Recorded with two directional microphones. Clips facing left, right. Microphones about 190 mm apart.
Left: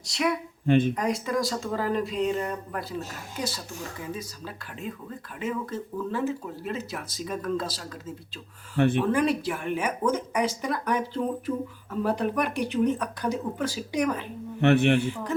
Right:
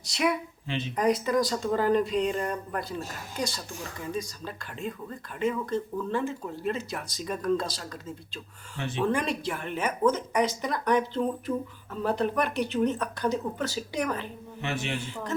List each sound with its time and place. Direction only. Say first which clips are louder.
0.0 s speech: even; centre (ahead or behind)
0.7 s speech: left 12 dB; 50° left (ahead or behind)
0.9 s speech: right 3 dB; centre (ahead or behind)
4.1 s speech: right 2 dB; 5° left (ahead or behind)
8.8 s a man's voice: left 8 dB; 55° left (ahead or behind)
9.1 s speech: left 5 dB; 5° left (ahead or behind)
14.6 s a man's voice: left 12 dB; 65° left (ahead or behind)